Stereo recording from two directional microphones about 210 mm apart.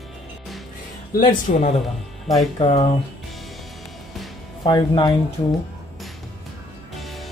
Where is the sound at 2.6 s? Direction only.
30° left (ahead or behind).